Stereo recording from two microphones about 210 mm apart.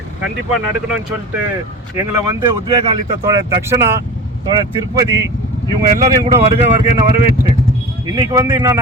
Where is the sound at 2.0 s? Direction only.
20° right (ahead or behind).